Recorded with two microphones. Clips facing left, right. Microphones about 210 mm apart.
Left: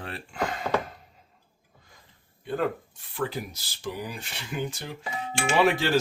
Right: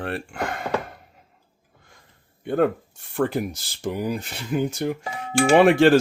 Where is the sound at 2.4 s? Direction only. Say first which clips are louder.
Right 7 dB; 60° right (ahead or behind).